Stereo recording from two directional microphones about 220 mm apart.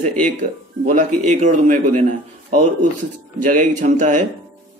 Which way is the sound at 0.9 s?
35° right (ahead or behind).